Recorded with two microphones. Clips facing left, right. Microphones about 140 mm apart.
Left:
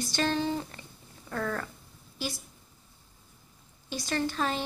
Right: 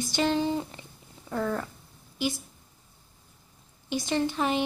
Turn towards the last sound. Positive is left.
turn(degrees=-15)  # may be behind; listen again after turning